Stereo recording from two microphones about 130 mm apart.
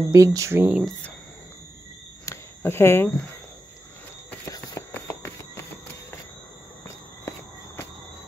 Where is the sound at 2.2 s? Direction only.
20° left (ahead or behind).